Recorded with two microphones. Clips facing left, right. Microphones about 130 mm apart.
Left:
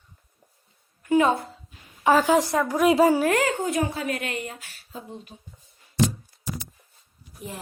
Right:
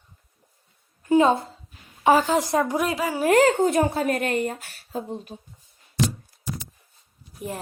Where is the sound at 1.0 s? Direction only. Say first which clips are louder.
Right 2 dB; 30° right (ahead or behind).